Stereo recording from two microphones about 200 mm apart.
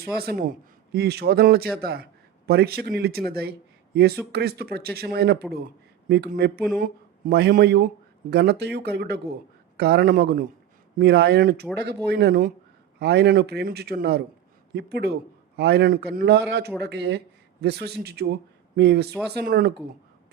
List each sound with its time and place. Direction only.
0.0 s a man's voice: 50° right (ahead or behind)